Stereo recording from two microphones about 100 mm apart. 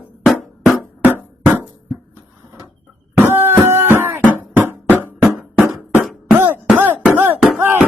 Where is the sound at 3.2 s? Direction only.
20° right (ahead or behind).